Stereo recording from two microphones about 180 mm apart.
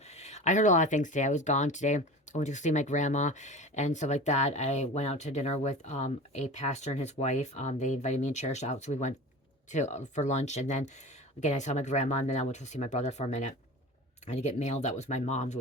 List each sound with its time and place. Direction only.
0.1 s speech: 40° left (ahead or behind)